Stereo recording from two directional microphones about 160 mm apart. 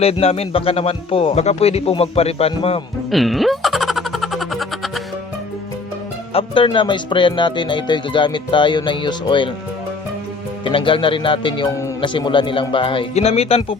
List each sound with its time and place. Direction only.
0.0 s a man's voice: 40° left (ahead or behind)
3.1 s a sound: centre (ahead or behind)
6.3 s speech: 30° left (ahead or behind)
10.6 s a man's voice: 30° left (ahead or behind)